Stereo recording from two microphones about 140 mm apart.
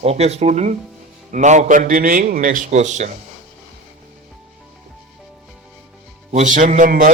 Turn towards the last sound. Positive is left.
turn(degrees=-75)  # may be behind; listen again after turning